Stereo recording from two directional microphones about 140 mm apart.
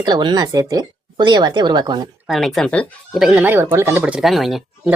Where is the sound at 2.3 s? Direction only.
Centre (ahead or behind).